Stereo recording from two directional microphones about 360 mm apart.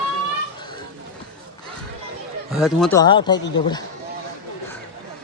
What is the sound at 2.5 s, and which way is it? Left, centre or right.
Speech, centre.